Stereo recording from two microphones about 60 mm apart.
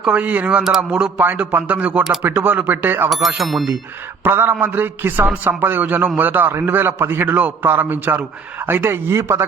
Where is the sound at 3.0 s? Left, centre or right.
Centre.